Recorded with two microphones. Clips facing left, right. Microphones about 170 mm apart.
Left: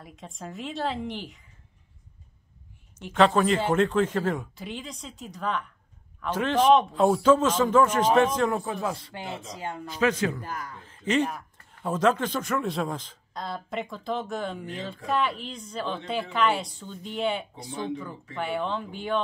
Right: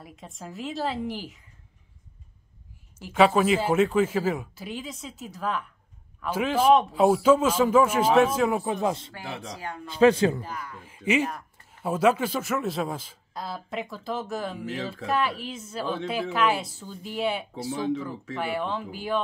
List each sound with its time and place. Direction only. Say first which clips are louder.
0.0 s speech: left 1 dB; centre (ahead or behind)
3.0 s a man's voice: right 1 dB; 5° right (ahead or behind)
8.8 s a man's voice: right 4 dB; 25° right (ahead or behind)
9.5 s speech: left 1 dB; 25° left (ahead or behind)
9.8 s a man's voice: right 6 dB; 30° right (ahead or behind)
10.4 s a man's voice: left 1 dB; 45° left (ahead or behind)
10.8 s a man's voice: even; 10° right (ahead or behind)